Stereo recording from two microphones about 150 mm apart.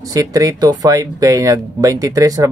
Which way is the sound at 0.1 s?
20° right (ahead or behind).